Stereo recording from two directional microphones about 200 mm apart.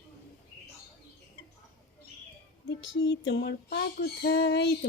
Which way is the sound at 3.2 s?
60° left (ahead or behind).